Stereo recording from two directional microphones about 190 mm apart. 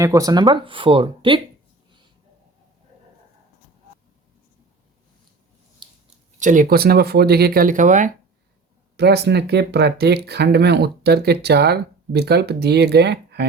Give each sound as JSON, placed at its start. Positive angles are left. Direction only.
{"t": 0.0, "sound": "speech", "side_deg": -20}
{"t": 6.4, "sound": "speech", "side_deg": -45}
{"t": 9.0, "sound": "speech", "side_deg": -60}